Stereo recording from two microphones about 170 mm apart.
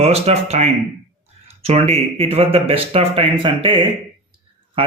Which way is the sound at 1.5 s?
35° right (ahead or behind).